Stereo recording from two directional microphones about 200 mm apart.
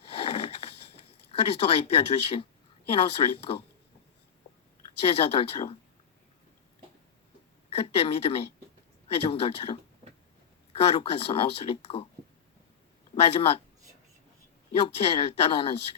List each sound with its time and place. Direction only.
0.1 s sniff: 30° left (ahead or behind)
1.4 s speech: 30° left (ahead or behind)
4.9 s speech: 30° left (ahead or behind)
7.8 s speech: 30° left (ahead or behind)
13.1 s speech: 30° left (ahead or behind)
14.7 s speech: 30° left (ahead or behind)